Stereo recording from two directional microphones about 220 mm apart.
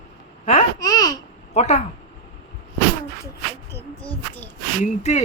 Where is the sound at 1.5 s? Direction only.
30° left (ahead or behind).